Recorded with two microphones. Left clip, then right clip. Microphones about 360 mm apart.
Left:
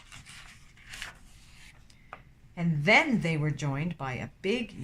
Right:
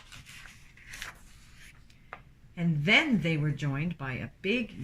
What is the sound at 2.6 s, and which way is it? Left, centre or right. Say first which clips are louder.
Speech: left 2 dB; centre.